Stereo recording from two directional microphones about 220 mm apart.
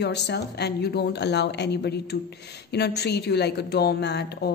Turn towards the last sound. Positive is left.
turn(degrees=50)  # may be behind; listen again after turning